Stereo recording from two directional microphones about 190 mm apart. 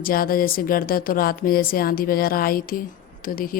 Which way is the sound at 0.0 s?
50° left (ahead or behind).